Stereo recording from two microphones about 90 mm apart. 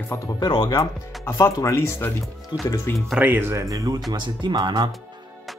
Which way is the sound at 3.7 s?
40° right (ahead or behind).